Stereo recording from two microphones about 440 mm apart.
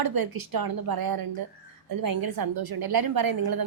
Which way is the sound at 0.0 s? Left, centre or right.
Right.